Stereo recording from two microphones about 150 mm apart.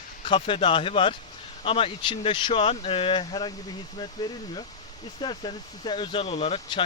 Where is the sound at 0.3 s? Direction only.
35° left (ahead or behind).